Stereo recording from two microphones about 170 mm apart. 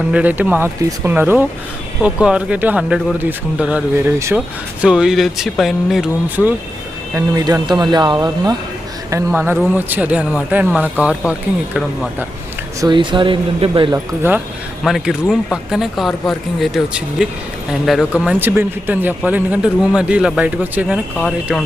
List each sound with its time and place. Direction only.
0.1 s speech: 10° right (ahead or behind)
7.1 s speech: 20° right (ahead or behind)
12.8 s speech: 25° right (ahead or behind)
13.9 s speech: 10° right (ahead or behind)
14.8 s speech: centre (ahead or behind)